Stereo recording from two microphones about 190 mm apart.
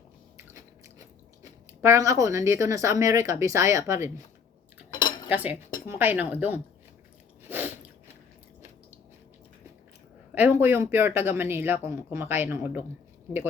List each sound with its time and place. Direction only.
0.3 s biting: 15° right (ahead or behind)
1.8 s speech: 15° right (ahead or behind)
4.9 s cutlery: 25° left (ahead or behind)
5.3 s speech: 10° right (ahead or behind)
7.4 s chewing: 10° right (ahead or behind)
10.3 s speech: 10° right (ahead or behind)